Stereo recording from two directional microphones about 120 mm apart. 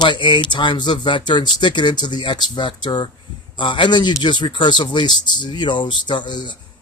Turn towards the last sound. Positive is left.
turn(degrees=40)  # may be behind; listen again after turning